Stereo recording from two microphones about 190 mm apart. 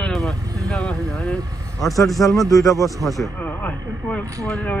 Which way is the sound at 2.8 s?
Centre (ahead or behind).